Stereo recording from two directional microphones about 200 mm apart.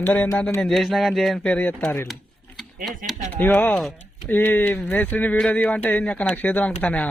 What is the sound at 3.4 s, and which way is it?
Speech, 10° left (ahead or behind).